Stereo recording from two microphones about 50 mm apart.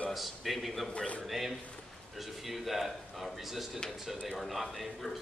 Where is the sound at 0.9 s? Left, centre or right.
Left.